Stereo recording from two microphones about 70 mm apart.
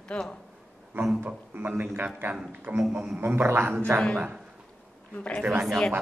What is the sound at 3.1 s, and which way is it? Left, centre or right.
Speech, right.